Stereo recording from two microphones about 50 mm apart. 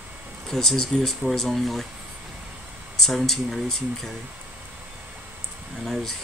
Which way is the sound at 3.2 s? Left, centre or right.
Centre.